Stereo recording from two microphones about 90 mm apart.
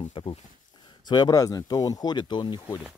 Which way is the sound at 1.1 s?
45° left (ahead or behind).